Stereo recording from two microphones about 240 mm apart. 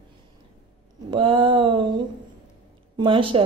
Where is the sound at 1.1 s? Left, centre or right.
Right.